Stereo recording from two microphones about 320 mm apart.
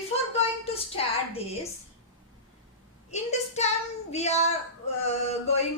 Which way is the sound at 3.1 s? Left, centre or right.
Left.